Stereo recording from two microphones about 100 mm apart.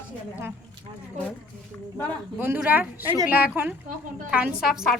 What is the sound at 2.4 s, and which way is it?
A woman's voice, 20° right (ahead or behind).